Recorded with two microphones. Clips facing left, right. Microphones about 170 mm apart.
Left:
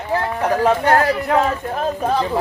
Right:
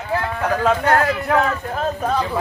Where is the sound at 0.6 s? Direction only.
30° left (ahead or behind).